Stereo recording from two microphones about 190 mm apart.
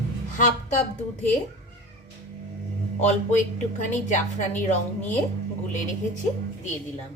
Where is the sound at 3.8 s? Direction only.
40° left (ahead or behind).